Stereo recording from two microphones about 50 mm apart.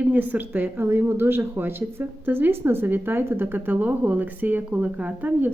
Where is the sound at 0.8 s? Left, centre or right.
Right.